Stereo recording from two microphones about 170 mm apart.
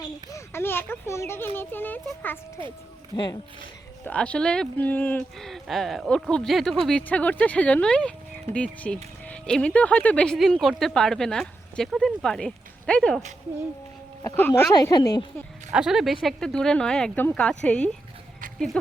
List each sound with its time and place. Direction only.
0.3 s speech: 15° left (ahead or behind)
3.1 s a woman's voice: 25° left (ahead or behind)
4.0 s speech: 5° left (ahead or behind)
14.3 s speech: 10° left (ahead or behind)
14.7 s a woman's voice: 25° left (ahead or behind)
15.7 s speech: centre (ahead or behind)